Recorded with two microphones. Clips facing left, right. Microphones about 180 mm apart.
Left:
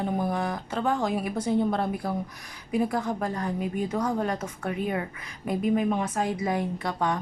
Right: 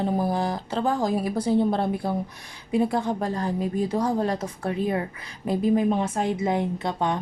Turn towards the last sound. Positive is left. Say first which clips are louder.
# right 2 dB
turn(degrees=-25)  # may be behind; listen again after turning